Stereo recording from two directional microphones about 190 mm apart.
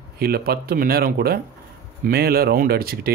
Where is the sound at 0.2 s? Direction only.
55° right (ahead or behind).